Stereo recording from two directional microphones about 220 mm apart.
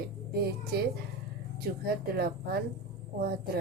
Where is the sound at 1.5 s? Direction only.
45° right (ahead or behind).